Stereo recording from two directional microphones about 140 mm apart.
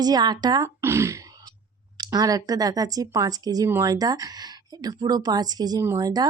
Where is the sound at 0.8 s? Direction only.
20° right (ahead or behind).